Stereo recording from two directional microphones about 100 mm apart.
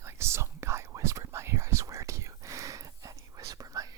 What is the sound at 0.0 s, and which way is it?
Whispering, 25° right (ahead or behind).